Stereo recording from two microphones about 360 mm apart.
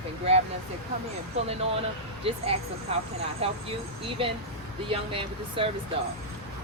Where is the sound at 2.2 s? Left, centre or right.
Centre.